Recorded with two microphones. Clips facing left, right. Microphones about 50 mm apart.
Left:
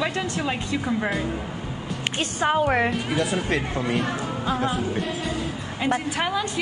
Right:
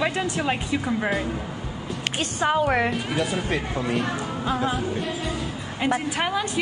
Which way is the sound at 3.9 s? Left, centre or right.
Centre.